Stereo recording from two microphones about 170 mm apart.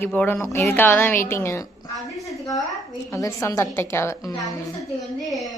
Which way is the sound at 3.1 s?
20° left (ahead or behind).